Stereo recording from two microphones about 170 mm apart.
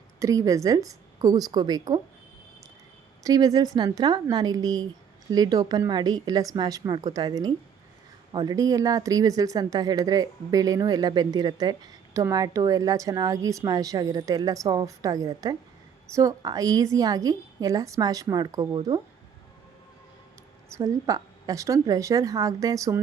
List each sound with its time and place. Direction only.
0.2 s speech: 20° right (ahead or behind)
3.2 s speech: 20° right (ahead or behind)
20.7 s speech: 20° right (ahead or behind)